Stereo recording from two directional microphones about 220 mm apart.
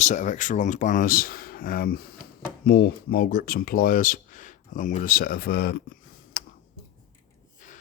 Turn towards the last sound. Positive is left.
turn(degrees=35)  # may be behind; listen again after turning